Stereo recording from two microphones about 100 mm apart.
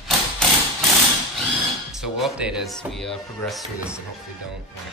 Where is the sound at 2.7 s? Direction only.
5° left (ahead or behind).